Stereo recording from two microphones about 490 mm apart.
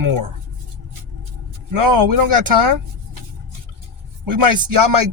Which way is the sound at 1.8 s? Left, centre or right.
Right.